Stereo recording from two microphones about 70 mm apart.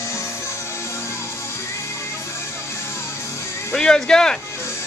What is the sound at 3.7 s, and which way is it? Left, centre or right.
Speech, centre.